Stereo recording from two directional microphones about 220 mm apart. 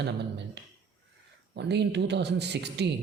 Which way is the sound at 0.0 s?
50° right (ahead or behind).